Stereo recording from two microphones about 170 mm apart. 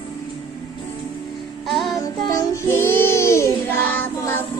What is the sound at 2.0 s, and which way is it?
Child singing, 20° left (ahead or behind).